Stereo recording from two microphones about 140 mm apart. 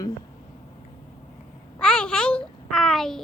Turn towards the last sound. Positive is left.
turn(degrees=5)  # may be behind; listen again after turning